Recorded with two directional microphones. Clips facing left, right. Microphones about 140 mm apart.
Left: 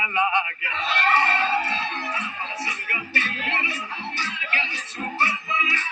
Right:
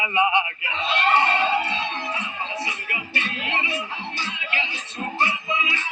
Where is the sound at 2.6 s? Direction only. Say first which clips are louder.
Even; 20° right (ahead or behind).